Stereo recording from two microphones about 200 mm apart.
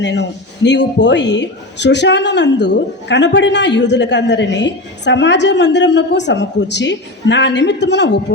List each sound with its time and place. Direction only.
0.0 s speech: 60° left (ahead or behind)